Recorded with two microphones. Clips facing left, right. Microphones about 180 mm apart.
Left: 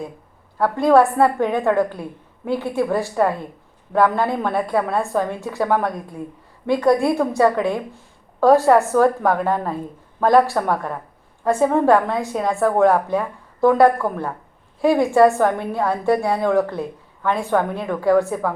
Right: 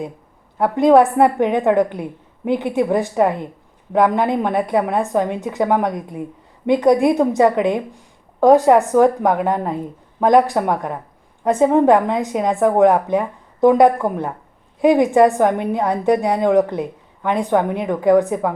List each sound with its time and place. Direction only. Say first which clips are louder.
0.6 s a woman's voice: right 2 dB; 20° right (ahead or behind)